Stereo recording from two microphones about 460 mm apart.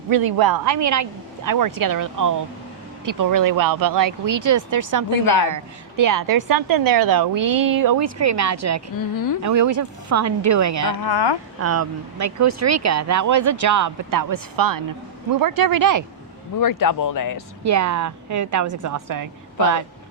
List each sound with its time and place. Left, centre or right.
0.1 s a woman's voice: right
9.1 s speech: left
9.4 s speech: right
11.1 s speech: left
11.6 s a woman's voice: right
16.6 s speech: left
17.6 s speech: right